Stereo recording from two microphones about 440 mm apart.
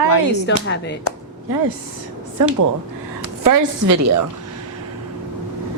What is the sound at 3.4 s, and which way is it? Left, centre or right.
Speech, right.